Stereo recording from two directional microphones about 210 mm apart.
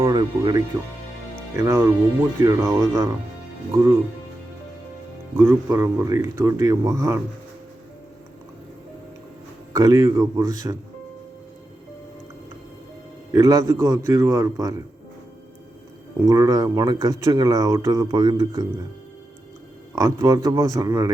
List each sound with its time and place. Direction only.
0.0 s speech: 20° right (ahead or behind)
5.4 s speech: 10° right (ahead or behind)
9.7 s speech: 15° right (ahead or behind)
13.3 s speech: 15° right (ahead or behind)
16.2 s speech: 15° right (ahead or behind)
20.0 s speech: 15° right (ahead or behind)